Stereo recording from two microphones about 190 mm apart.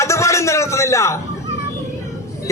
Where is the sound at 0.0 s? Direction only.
15° left (ahead or behind).